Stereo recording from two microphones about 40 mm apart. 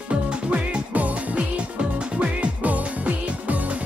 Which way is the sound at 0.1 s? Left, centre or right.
Right.